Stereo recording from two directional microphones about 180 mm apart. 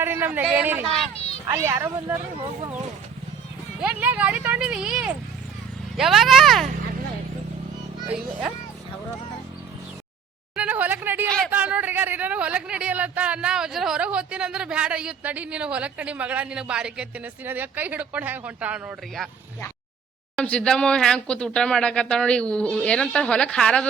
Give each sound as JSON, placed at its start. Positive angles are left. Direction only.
{"t": 0.0, "sound": "speech", "side_deg": -10}
{"t": 1.1, "sound": "children playing", "side_deg": 35}
{"t": 1.5, "sound": "speech", "side_deg": -15}
{"t": 3.8, "sound": "speech", "side_deg": -5}
{"t": 8.1, "sound": "speech", "side_deg": -5}
{"t": 10.5, "sound": "a sound", "side_deg": -10}
{"t": 11.3, "sound": "speech", "side_deg": 0}
{"t": 11.5, "sound": "speech", "side_deg": -10}
{"t": 20.3, "sound": "speech", "side_deg": 5}